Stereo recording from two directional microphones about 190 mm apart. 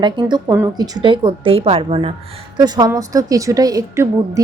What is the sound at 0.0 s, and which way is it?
A woman's voice, 20° right (ahead or behind).